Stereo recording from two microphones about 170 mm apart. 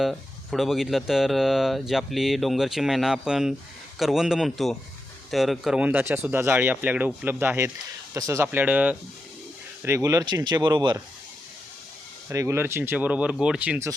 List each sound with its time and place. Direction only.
0.0 s speech: centre (ahead or behind); by 11.0 s 25° right (ahead or behind)
12.3 s speech: 15° right (ahead or behind)